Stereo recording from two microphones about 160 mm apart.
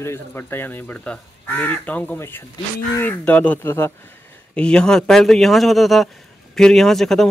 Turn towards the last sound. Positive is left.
turn(degrees=0)  # may be behind; listen again after turning